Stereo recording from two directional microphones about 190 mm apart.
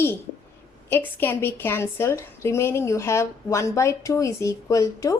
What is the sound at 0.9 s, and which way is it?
A woman's voice, 10° left (ahead or behind).